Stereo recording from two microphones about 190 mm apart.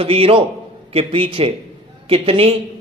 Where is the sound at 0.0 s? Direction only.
30° right (ahead or behind).